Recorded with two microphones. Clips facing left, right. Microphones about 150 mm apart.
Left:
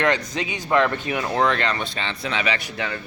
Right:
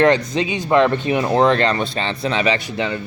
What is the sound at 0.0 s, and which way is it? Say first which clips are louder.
Speech: right 7 dB; 30° right (ahead or behind).